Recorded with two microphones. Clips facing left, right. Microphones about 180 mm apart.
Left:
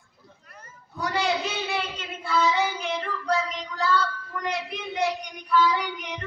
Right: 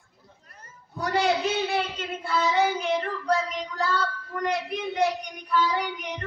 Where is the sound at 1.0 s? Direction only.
50° right (ahead or behind).